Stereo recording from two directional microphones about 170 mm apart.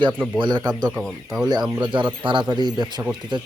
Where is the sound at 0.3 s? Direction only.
25° right (ahead or behind).